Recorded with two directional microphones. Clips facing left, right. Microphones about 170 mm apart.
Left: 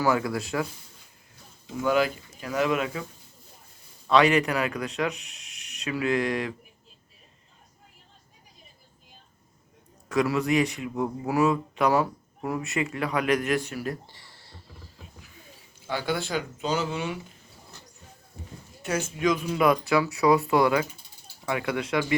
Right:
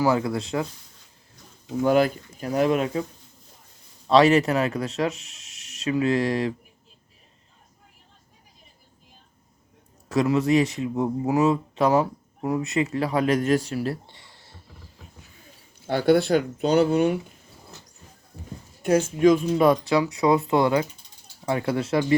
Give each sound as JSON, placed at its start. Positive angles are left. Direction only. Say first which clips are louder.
{"t": 0.1, "sound": "a man's voice", "louder": "right 2 dB", "side_deg": -25}
{"t": 1.8, "sound": "speech", "louder": "right 4 dB", "side_deg": -45}
{"t": 4.0, "sound": "a man's voice", "louder": "right 4 dB", "side_deg": -30}
{"t": 10.1, "sound": "a man's voice", "louder": "right 4 dB", "side_deg": -25}
{"t": 14.2, "sound": "a sound", "louder": "right 2 dB", "side_deg": -20}
{"t": 15.9, "sound": "speech", "louder": "right 10 dB", "side_deg": -55}
{"t": 18.8, "sound": "speech", "louder": "right 8 dB", "side_deg": -50}
{"t": 19.5, "sound": "a man's voice", "louder": "right 3 dB", "side_deg": -30}